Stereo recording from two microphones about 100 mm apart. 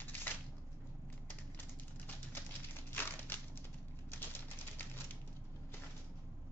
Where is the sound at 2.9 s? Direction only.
20° left (ahead or behind).